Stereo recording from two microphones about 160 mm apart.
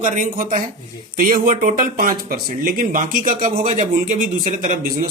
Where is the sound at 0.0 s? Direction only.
55° right (ahead or behind).